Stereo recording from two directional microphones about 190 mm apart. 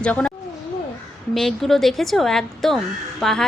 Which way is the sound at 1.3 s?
Centre (ahead or behind).